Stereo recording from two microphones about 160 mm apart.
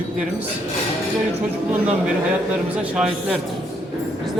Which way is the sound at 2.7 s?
5° right (ahead or behind).